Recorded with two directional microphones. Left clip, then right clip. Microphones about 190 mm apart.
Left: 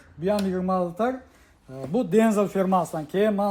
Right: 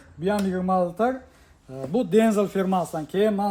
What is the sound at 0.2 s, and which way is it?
Speech, centre (ahead or behind).